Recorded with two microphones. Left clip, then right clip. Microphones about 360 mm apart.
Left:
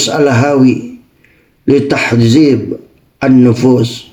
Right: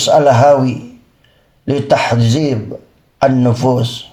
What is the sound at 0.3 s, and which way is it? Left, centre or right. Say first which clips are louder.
Speech: right 4 dB; right.